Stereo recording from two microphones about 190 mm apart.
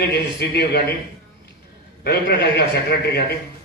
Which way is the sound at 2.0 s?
55° left (ahead or behind).